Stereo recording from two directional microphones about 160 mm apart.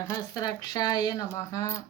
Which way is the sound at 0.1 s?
20° left (ahead or behind).